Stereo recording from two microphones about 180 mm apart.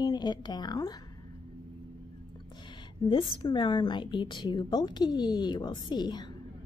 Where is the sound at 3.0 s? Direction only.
25° left (ahead or behind).